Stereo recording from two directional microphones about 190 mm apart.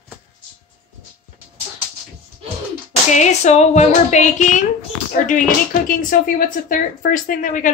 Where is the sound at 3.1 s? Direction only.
35° left (ahead or behind).